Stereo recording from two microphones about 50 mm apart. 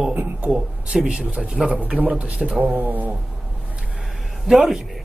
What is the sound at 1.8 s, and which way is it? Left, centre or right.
Speech, right.